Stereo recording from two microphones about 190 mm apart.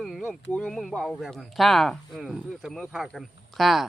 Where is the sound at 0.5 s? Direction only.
Centre (ahead or behind).